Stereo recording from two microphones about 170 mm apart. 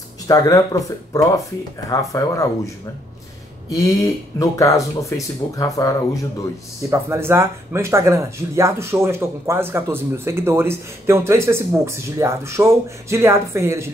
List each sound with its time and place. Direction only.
0.3 s speech: 20° left (ahead or behind)
3.7 s speech: 20° left (ahead or behind)
6.9 s speech: 15° right (ahead or behind)